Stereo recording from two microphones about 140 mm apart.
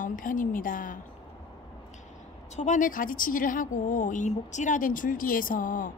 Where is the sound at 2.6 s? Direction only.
65° left (ahead or behind).